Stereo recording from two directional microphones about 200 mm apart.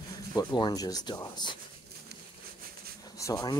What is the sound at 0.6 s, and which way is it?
Speech, 20° left (ahead or behind).